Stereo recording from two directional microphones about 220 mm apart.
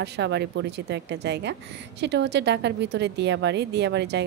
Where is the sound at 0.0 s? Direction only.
50° right (ahead or behind).